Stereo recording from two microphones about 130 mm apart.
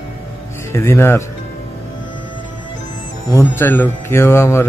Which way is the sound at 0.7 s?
20° left (ahead or behind).